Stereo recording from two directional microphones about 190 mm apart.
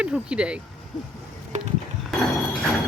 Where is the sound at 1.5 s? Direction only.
40° right (ahead or behind).